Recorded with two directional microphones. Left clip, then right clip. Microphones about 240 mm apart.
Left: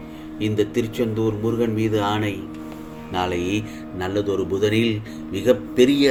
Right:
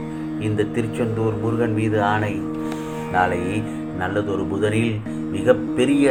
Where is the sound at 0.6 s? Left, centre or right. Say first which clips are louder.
Left 1 dB; left.